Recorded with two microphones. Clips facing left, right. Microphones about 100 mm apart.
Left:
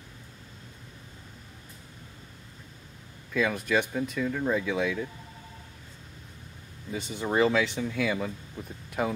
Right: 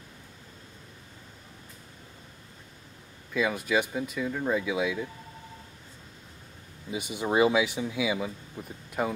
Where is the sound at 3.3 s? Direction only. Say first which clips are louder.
Even; 5° right (ahead or behind).